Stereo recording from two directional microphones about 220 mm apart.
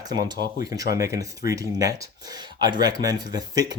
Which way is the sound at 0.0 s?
20° right (ahead or behind).